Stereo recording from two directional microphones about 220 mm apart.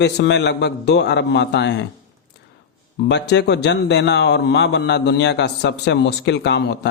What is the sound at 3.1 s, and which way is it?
A man's voice, 50° left (ahead or behind).